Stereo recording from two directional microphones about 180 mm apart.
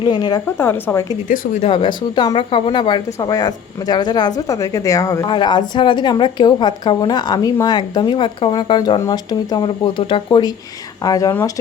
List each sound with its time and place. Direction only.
0.0 s speech: 25° left (ahead or behind)
0.6 s speech: 10° left (ahead or behind)
1.3 s speech: 50° left (ahead or behind)
1.6 s speech: 25° left (ahead or behind)